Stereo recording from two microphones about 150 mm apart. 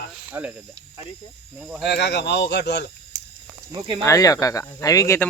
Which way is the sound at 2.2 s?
90° left.